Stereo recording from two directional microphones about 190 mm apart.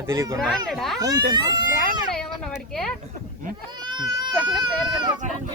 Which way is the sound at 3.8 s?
20° right (ahead or behind).